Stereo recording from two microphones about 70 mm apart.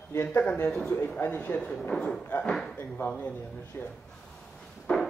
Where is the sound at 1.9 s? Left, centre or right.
Centre.